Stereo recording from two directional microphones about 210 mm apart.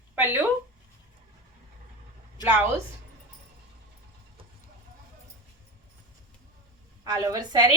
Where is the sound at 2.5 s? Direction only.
10° right (ahead or behind).